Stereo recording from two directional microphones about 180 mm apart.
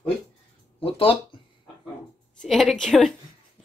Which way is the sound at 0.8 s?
30° left (ahead or behind).